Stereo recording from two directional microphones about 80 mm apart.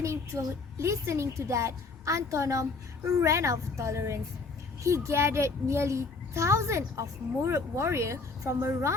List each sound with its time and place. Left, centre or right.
0.0 s a woman's voice: right